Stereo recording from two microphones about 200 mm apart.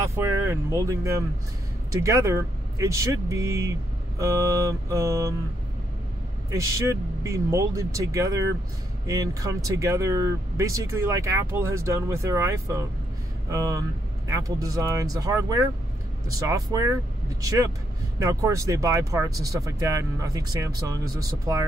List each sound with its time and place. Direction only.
0.1 s speech: 10° right (ahead or behind)
6.5 s speech: 15° right (ahead or behind)